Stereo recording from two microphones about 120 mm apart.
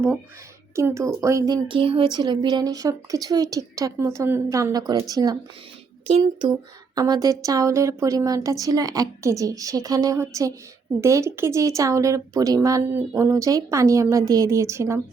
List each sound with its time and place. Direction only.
0.8 s a woman's voice: 25° right (ahead or behind)
1.6 s a woman's voice: 45° right (ahead or behind)
6.1 s speech: 55° right (ahead or behind)
6.5 s a woman's voice: 35° right (ahead or behind)